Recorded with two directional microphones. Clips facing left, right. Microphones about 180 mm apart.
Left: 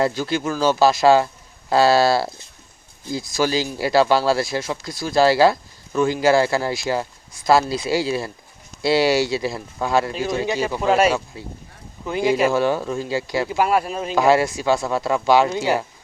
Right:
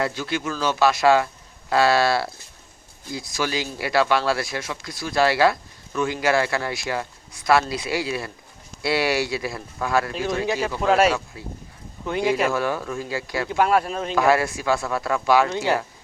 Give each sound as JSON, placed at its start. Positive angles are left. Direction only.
{"t": 0.0, "sound": "speech", "side_deg": 35}
{"t": 10.1, "sound": "speech", "side_deg": 0}
{"t": 12.5, "sound": "speech", "side_deg": 25}
{"t": 13.5, "sound": "speech", "side_deg": 5}
{"t": 14.2, "sound": "speech", "side_deg": 20}
{"t": 15.4, "sound": "speech", "side_deg": 10}